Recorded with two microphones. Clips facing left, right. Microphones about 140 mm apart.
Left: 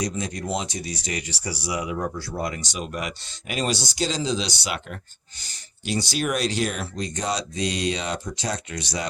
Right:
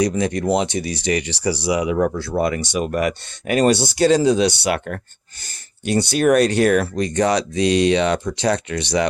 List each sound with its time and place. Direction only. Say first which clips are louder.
0.0 s speech: right 9 dB; 70° right (ahead or behind)